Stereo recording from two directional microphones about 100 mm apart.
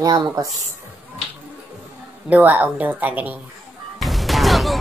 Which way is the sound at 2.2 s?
15° right (ahead or behind).